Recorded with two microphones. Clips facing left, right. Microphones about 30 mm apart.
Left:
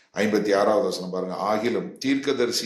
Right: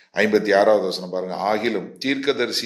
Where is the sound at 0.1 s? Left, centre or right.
Right.